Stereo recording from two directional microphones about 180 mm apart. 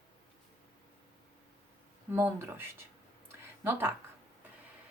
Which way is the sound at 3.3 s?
15° right (ahead or behind).